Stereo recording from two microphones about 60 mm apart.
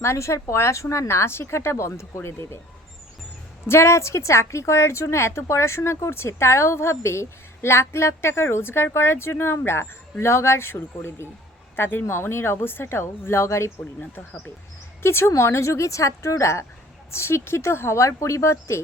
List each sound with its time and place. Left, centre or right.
0.0 s a woman's voice: left
3.7 s a woman's voice: left
15.0 s a woman's voice: left